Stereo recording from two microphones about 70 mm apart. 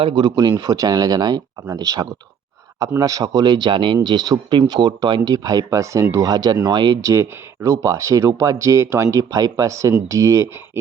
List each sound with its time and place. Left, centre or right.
0.1 s speech: right
0.6 s speech: right
6.7 s speech: right
7.0 s speech: right